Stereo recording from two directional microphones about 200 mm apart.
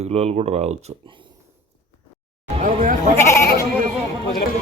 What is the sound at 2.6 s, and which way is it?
Speech, 40° right (ahead or behind).